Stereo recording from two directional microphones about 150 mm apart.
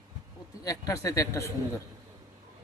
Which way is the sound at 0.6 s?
25° left (ahead or behind).